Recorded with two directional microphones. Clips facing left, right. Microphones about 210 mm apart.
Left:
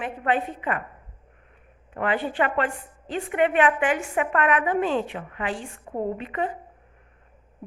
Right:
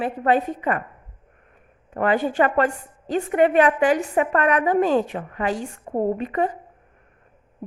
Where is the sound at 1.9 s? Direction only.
40° right (ahead or behind).